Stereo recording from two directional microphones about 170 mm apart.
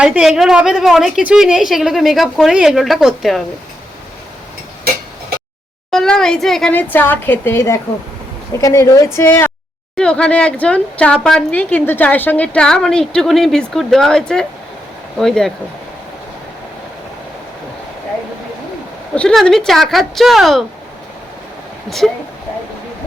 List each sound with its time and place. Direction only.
0.0 s a woman's voice: 5° right (ahead or behind)
5.9 s a woman's voice: 5° left (ahead or behind)
19.1 s a woman's voice: 5° left (ahead or behind)
21.8 s a woman's voice: centre (ahead or behind)